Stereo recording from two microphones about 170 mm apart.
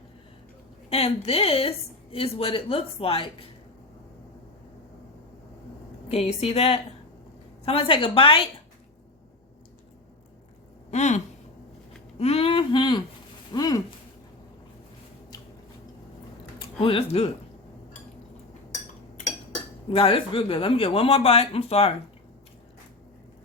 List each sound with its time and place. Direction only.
0.9 s speech: 35° left (ahead or behind)
6.1 s speech: 35° left (ahead or behind)
10.9 s speech: 45° left (ahead or behind)
12.2 s a sound: 35° left (ahead or behind)
13.5 s speech: 20° left (ahead or behind)
16.6 s speech: 30° left (ahead or behind)
19.9 s speech: 30° left (ahead or behind)